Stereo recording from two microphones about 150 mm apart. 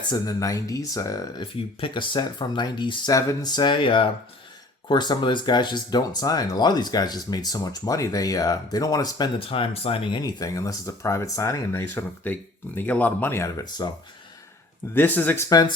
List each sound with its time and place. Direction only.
0.1 s speech: 25° left (ahead or behind)
1.5 s speech: 35° left (ahead or behind)
14.9 s speech: 10° left (ahead or behind)
15.4 s speech: 25° left (ahead or behind)